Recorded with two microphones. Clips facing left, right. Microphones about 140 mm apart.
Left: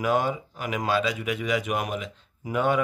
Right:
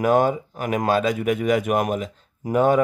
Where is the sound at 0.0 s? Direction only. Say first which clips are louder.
Right 6 dB; 50° right (ahead or behind).